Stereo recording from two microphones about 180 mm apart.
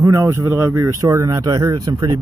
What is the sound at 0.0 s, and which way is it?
Speech, 15° right (ahead or behind).